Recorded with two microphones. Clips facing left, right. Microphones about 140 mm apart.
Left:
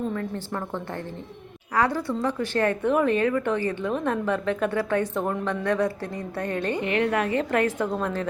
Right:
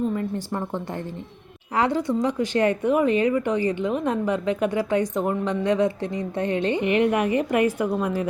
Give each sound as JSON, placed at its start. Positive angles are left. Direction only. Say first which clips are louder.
{"t": 0.1, "sound": "speech", "louder": "right 3 dB", "side_deg": -15}
{"t": 5.6, "sound": "speech", "louder": "right 3 dB", "side_deg": -20}